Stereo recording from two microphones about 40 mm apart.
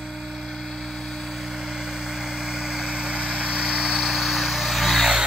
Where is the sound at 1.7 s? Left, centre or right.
Centre.